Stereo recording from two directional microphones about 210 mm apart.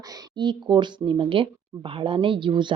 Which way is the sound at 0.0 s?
15° right (ahead or behind).